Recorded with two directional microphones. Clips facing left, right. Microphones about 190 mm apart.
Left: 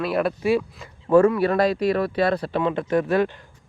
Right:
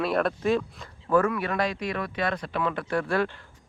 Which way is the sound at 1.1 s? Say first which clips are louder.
Left 7 dB; 30° left (ahead or behind).